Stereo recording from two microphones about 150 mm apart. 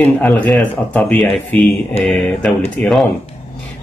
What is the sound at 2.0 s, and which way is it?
Music, 45° left (ahead or behind).